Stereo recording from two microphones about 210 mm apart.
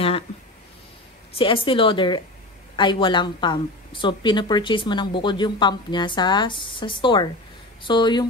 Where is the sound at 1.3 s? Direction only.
25° left (ahead or behind).